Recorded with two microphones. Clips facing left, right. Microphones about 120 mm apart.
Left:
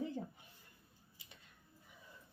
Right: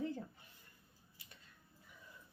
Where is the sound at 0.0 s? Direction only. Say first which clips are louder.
Even; 15° left (ahead or behind).